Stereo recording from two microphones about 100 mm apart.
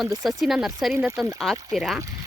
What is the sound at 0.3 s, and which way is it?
Speech, centre (ahead or behind).